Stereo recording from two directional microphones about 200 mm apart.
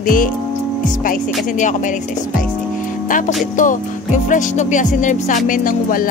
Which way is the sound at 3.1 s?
40° left (ahead or behind).